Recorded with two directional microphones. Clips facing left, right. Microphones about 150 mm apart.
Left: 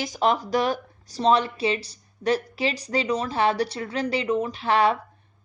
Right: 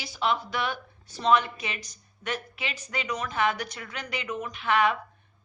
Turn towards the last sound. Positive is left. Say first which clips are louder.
# left 4 dB
turn(degrees=35)  # may be behind; listen again after turning